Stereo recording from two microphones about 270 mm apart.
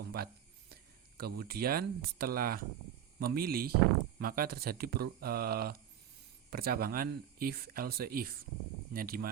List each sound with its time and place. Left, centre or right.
0.1 s speech: right